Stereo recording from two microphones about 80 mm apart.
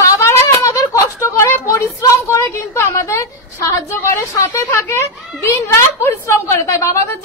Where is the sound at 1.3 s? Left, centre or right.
Left.